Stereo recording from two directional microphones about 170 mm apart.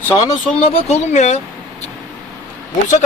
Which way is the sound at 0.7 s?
40° left (ahead or behind).